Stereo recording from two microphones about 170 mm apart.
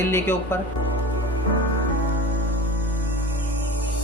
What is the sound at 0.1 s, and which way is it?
Speech, 15° left (ahead or behind).